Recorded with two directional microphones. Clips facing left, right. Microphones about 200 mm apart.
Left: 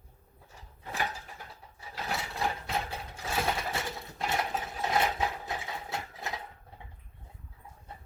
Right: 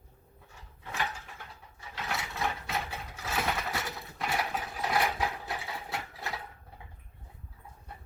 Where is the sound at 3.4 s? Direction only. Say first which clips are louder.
Left 1 dB; 25° left (ahead or behind).